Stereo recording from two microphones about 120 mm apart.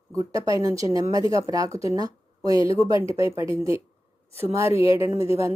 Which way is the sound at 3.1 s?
50° left (ahead or behind).